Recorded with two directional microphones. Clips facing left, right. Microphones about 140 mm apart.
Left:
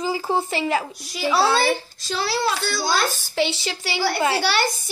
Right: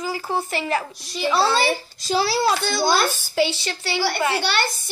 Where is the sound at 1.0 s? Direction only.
5° left (ahead or behind).